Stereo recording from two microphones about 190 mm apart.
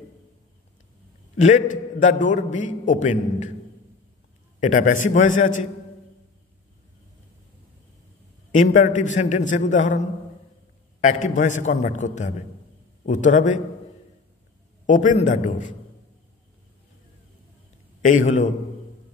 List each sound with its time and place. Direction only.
1.3 s a man's voice: 40° left (ahead or behind)
4.6 s a man's voice: 45° left (ahead or behind)
8.5 s a man's voice: 40° left (ahead or behind)
14.9 s a man's voice: 40° left (ahead or behind)
18.0 s a man's voice: 40° left (ahead or behind)